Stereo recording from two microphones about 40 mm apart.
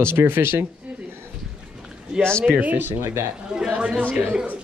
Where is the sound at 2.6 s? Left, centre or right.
Right.